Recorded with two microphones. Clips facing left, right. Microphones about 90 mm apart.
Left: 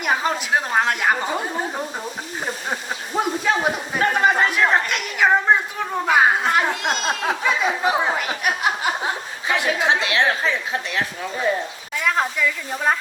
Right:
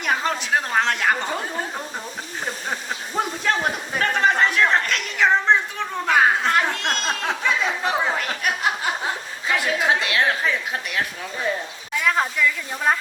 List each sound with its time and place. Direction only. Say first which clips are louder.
0.0 s a woman's voice: left 2 dB; 10° left (ahead or behind)
3.2 s a sound: left 2 dB; 5° left (ahead or behind)
9.5 s chatter: left 1 dB; 20° left (ahead or behind)
11.9 s sizzle: even; centre (ahead or behind)